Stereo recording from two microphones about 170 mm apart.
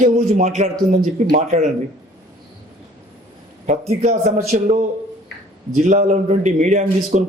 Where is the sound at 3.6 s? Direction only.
45° right (ahead or behind).